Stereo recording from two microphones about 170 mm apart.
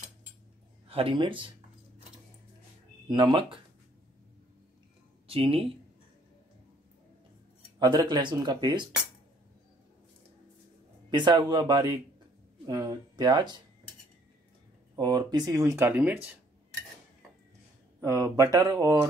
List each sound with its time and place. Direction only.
0.8 s speech: 35° right (ahead or behind)
3.1 s speech: 25° right (ahead or behind)
5.3 s speech: 35° right (ahead or behind)
7.8 s speech: 25° right (ahead or behind)
11.1 s speech: 25° right (ahead or behind)
15.0 s speech: 25° right (ahead or behind); by 16.3 s 10° right (ahead or behind)
18.0 s speech: 20° right (ahead or behind)